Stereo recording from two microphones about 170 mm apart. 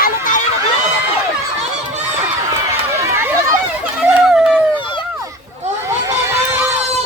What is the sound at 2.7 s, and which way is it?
Run, 15° right (ahead or behind).